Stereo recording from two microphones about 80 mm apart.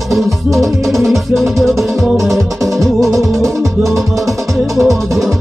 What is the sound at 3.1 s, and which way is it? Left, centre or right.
Music, right.